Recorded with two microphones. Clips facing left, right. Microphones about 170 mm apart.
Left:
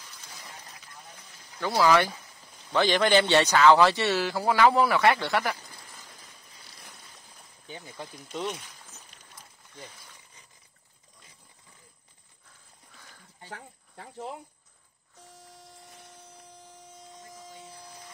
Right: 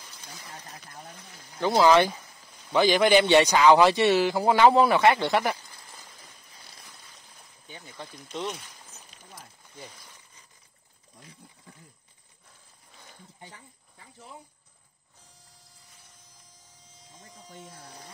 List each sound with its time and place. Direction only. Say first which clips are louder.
1.6 s speech: right 3 dB; 25° right (ahead or behind)
2.7 s a man's voice: right 2 dB; 10° right (ahead or behind)
7.6 s speech: left 2 dB; 20° left (ahead or behind)
8.3 s speech: even; 5° left (ahead or behind)
13.0 s a sound: right 4 dB; 20° right (ahead or behind)
13.5 s speech: left 8 dB; 70° left (ahead or behind)
15.5 s a sound: left 11 dB; 70° left (ahead or behind)